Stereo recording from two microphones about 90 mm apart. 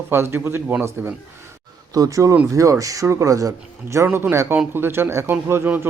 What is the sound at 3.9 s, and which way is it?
Speech, 25° right (ahead or behind).